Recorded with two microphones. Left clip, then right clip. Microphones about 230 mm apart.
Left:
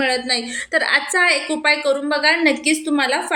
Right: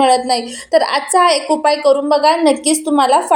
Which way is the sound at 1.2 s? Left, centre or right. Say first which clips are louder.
Right 6 dB; right.